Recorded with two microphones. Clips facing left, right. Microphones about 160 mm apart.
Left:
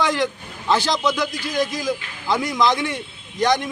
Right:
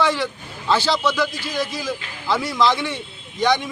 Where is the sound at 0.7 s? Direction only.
15° left (ahead or behind).